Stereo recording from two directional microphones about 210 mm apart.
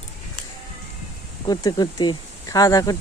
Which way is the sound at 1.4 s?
20° left (ahead or behind).